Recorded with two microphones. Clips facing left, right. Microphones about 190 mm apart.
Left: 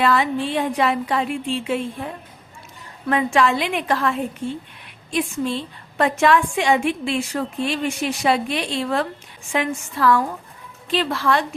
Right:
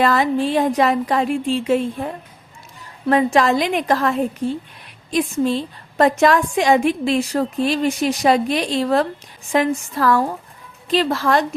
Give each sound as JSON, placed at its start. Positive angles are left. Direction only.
{"t": 0.0, "sound": "a woman's voice", "side_deg": -40}
{"t": 3.1, "sound": "a woman's voice", "side_deg": -40}